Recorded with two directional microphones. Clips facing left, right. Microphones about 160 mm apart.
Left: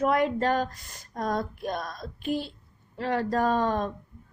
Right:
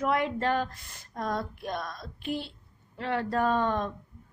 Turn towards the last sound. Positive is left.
turn(degrees=35)  # may be behind; listen again after turning